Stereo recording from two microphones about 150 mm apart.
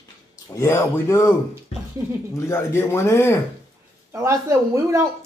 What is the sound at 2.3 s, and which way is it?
Speech, 20° left (ahead or behind).